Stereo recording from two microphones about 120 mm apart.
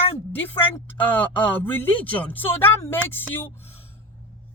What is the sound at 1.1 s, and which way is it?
Speech, 15° left (ahead or behind).